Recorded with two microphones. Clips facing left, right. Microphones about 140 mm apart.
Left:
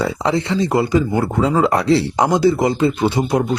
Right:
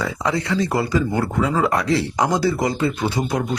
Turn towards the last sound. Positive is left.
turn(degrees=25)  # may be behind; listen again after turning